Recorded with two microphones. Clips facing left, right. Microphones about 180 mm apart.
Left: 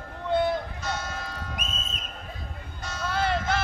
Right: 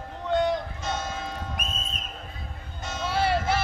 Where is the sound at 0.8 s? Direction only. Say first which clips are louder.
Right 2 dB; 25° right (ahead or behind).